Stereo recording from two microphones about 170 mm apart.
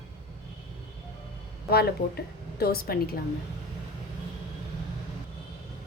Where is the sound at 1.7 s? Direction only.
65° left (ahead or behind).